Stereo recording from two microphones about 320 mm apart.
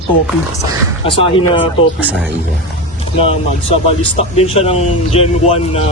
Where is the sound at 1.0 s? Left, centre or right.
Centre.